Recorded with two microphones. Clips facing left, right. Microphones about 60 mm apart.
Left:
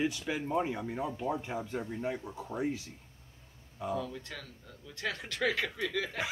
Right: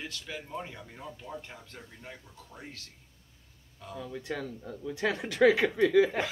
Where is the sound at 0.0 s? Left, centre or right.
Centre.